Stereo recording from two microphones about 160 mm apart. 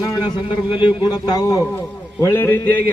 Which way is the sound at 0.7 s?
30° left (ahead or behind).